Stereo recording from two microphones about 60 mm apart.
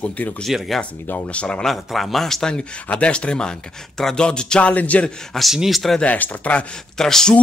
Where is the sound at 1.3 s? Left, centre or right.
Centre.